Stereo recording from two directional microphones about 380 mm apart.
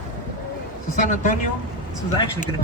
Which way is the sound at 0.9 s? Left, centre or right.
Left.